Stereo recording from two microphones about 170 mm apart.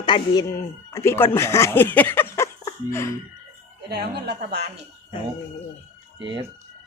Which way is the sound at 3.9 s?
70° right (ahead or behind).